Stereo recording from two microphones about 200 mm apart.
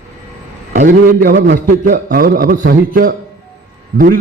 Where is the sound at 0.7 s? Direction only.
40° right (ahead or behind).